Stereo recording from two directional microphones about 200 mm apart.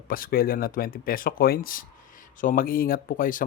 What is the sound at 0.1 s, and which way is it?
Speech, 45° left (ahead or behind).